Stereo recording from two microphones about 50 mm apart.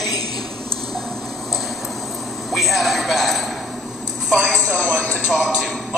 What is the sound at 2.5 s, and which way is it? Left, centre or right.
A man's voice, centre.